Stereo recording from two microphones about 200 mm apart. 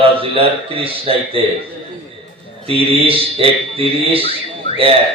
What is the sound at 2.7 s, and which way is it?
Speech, 30° right (ahead or behind).